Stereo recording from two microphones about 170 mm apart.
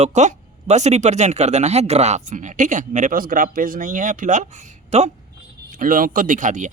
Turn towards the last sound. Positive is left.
turn(degrees=-50)  # may be behind; listen again after turning